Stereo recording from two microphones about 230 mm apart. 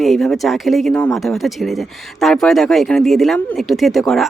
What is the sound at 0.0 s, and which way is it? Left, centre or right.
Speech, centre.